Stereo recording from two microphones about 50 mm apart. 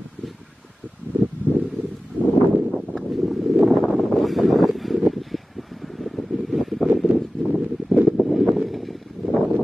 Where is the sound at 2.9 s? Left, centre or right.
Centre.